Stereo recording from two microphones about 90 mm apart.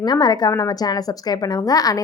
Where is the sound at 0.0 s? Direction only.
50° left (ahead or behind).